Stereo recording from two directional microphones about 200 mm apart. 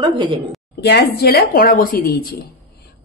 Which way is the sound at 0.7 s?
55° left (ahead or behind).